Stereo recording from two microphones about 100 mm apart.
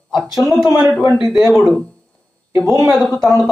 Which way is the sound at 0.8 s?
10° right (ahead or behind).